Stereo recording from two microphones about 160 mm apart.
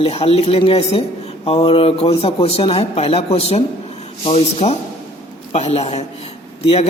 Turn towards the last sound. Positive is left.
turn(degrees=40)  # may be behind; listen again after turning